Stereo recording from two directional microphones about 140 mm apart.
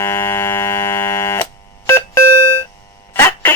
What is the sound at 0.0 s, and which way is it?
Buzzer, 20° left (ahead or behind).